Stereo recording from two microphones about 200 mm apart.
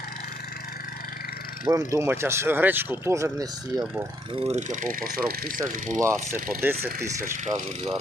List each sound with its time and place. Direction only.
1.6 s speech: 15° right (ahead or behind)
4.4 s speech: 35° right (ahead or behind)
6.0 s speech: 15° right (ahead or behind)
7.4 s speech: 35° right (ahead or behind)